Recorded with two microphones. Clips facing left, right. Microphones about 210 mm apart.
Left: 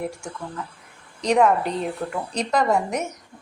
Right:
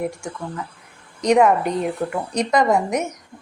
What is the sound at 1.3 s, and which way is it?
A woman's voice, 5° right (ahead or behind).